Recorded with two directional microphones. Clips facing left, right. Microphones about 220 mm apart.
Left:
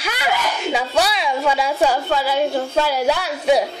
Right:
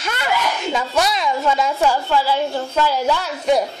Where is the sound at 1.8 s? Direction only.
15° left (ahead or behind).